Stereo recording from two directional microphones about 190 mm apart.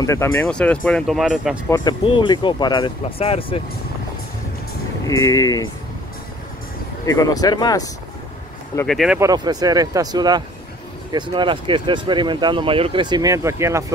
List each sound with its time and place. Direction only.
0.0 s speech: 15° left (ahead or behind); by 1.6 s 5° right (ahead or behind)
1.7 s speech: 25° left (ahead or behind)
5.0 s speech: 15° left (ahead or behind)
7.1 s speech: 20° left (ahead or behind)
8.8 s speech: centre (ahead or behind)
9.2 s speech: 20° right (ahead or behind)